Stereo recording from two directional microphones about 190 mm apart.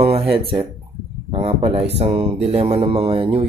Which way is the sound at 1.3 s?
30° right (ahead or behind).